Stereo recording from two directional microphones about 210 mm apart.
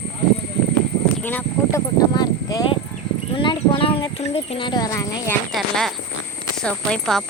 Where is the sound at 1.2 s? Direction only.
10° left (ahead or behind).